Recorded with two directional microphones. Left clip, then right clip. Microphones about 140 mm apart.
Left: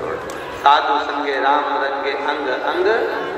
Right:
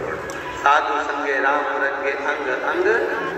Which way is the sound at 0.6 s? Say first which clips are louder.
Left 3 dB; 50° left (ahead or behind).